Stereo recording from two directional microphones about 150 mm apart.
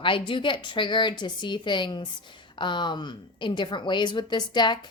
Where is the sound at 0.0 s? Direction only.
35° left (ahead or behind).